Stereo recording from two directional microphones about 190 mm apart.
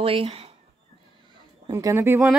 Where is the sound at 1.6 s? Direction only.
15° right (ahead or behind).